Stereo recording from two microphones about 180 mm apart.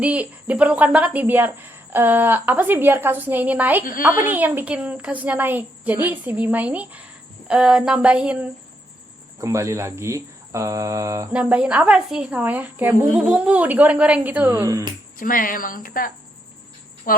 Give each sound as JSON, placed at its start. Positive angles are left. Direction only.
{"t": 0.0, "sound": "speech", "side_deg": -5}
{"t": 9.4, "sound": "speech", "side_deg": -15}
{"t": 11.3, "sound": "speech", "side_deg": -5}
{"t": 15.2, "sound": "speech", "side_deg": 50}